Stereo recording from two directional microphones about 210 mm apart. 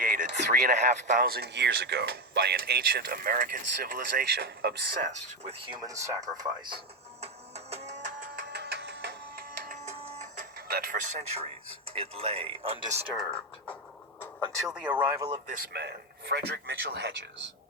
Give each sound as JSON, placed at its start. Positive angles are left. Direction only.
{"t": 0.0, "sound": "a sound", "side_deg": -40}
{"t": 1.0, "sound": "speech", "side_deg": -40}
{"t": 8.4, "sound": "a sound", "side_deg": -50}
{"t": 9.6, "sound": "printer", "side_deg": -35}
{"t": 10.7, "sound": "speech", "side_deg": -45}
{"t": 13.1, "sound": "speech", "side_deg": 5}
{"t": 15.4, "sound": "speech", "side_deg": -45}